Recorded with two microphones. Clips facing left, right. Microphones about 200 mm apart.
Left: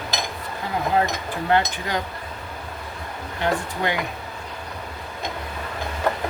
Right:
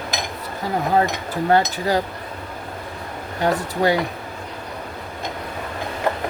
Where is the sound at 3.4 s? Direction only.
35° right (ahead or behind).